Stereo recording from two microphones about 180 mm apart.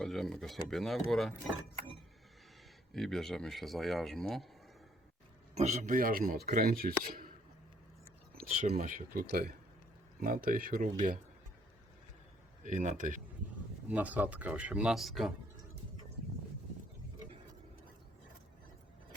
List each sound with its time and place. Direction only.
0.0 s speech: centre (ahead or behind)
2.9 s speech: centre (ahead or behind)
5.5 s speech: 40° right (ahead or behind)
8.8 s speech: 50° right (ahead or behind)
12.6 s speech: 45° right (ahead or behind)
13.9 s speech: 10° right (ahead or behind)